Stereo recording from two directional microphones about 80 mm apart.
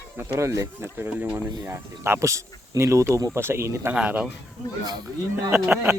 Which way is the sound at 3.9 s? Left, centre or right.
Centre.